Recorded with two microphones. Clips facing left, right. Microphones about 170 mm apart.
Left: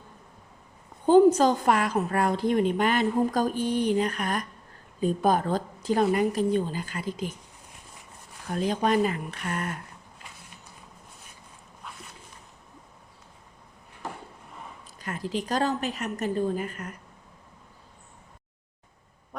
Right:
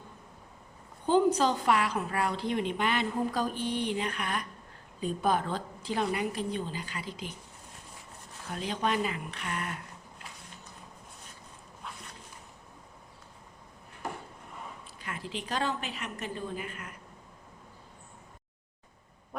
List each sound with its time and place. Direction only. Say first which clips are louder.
1.0 s a woman's voice: left 7 dB; 45° left (ahead or behind)
8.4 s a woman's voice: left 6 dB; 45° left (ahead or behind)
15.0 s a woman's voice: left 8 dB; 40° left (ahead or behind)